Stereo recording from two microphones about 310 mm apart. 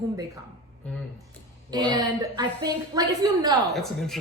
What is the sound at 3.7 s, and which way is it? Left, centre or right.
Speech, centre.